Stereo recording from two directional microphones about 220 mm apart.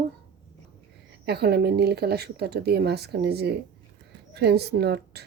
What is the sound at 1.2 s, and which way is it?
Speech, 45° right (ahead or behind).